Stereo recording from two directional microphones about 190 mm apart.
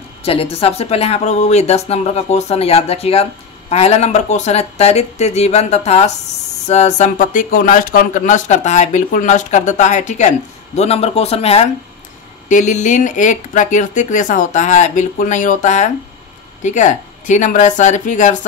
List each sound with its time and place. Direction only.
0.2 s speech: 30° left (ahead or behind)